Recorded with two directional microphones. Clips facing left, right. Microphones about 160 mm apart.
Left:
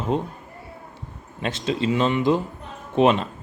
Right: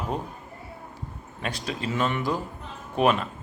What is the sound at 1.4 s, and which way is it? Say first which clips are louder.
Speech: left 7 dB; 25° left (ahead or behind).